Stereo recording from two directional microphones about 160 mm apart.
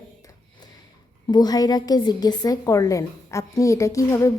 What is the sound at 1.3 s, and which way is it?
A woman's voice, 25° left (ahead or behind).